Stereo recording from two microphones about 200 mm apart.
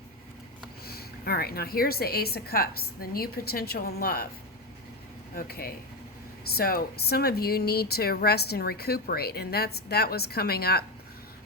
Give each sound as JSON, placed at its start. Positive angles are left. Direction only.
{"t": 0.9, "sound": "speech", "side_deg": 50}
{"t": 5.3, "sound": "speech", "side_deg": 45}